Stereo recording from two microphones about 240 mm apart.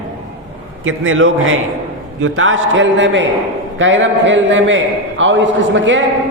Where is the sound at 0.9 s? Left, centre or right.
Right.